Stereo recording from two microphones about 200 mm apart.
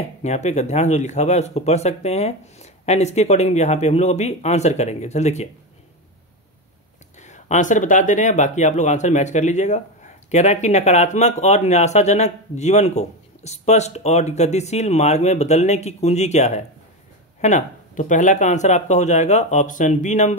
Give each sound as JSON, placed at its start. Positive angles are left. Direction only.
{"t": 0.2, "sound": "speech", "side_deg": 35}
{"t": 7.2, "sound": "speech", "side_deg": 35}